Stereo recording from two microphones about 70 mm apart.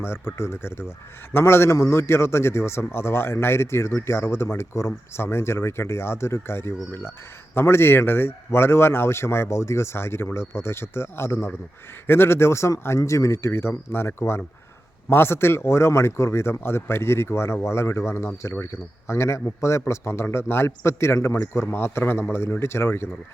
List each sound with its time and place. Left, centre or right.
0.0 s a man's voice: left